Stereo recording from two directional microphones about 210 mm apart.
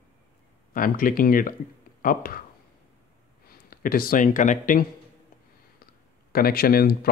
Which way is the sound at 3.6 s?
45° left (ahead or behind).